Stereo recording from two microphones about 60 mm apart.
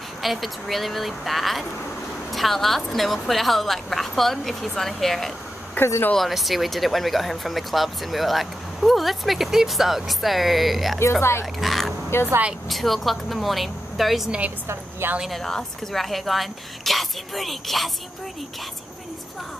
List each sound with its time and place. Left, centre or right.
0.2 s speech: centre
5.8 s speech: left
6.1 s speech: centre
11.0 s speech: left
11.6 s a sound: centre
12.1 s speech: left
12.6 s speech: centre
14.7 s a woman's voice: right
15.2 s speech: centre